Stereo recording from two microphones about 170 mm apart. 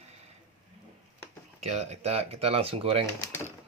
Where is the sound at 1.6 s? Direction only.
40° right (ahead or behind).